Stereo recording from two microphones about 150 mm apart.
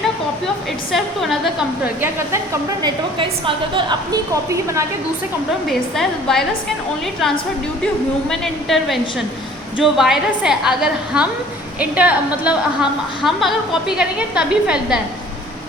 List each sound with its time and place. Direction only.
0.9 s a woman's voice: centre (ahead or behind)
2.8 s a woman's voice: 35° right (ahead or behind)
5.6 s a woman's voice: centre (ahead or behind)
8.3 s a woman's voice: centre (ahead or behind)